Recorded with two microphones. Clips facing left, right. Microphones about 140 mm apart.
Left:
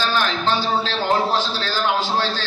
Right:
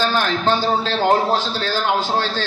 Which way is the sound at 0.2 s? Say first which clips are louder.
Right 2 dB; 50° right (ahead or behind).